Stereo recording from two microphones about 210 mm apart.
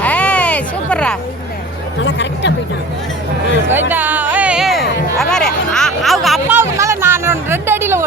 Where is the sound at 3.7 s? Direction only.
10° right (ahead or behind).